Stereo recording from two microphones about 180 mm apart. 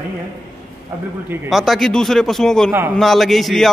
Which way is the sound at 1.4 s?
Centre (ahead or behind).